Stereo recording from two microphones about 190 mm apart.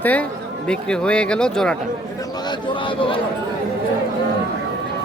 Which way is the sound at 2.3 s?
20° left (ahead or behind).